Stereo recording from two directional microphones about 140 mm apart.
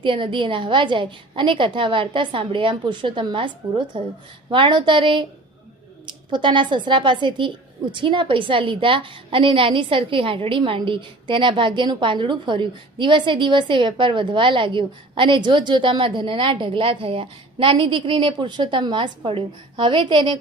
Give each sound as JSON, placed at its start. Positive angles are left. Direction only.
{"t": 0.0, "sound": "speech", "side_deg": -35}